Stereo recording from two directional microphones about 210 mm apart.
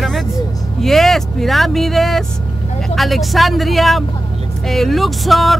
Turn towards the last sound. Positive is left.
turn(degrees=0)  # may be behind; listen again after turning